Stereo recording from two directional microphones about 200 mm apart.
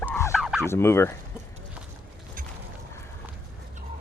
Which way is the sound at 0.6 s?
10° left (ahead or behind).